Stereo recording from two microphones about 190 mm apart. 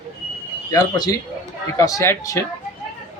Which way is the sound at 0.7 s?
20° left (ahead or behind).